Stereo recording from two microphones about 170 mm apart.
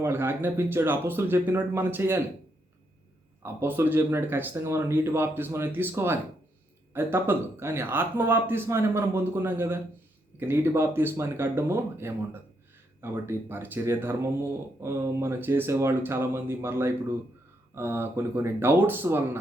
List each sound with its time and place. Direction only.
0.0 s speech: 15° right (ahead or behind)
3.4 s speech: 15° right (ahead or behind)